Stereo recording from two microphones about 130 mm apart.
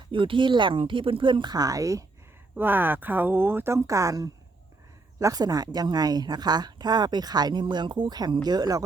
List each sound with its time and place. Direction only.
0.1 s a woman's voice: 40° right (ahead or behind); by 2.0 s 25° right (ahead or behind)
2.6 s a woman's voice: 15° right (ahead or behind); by 8.8 s 30° right (ahead or behind)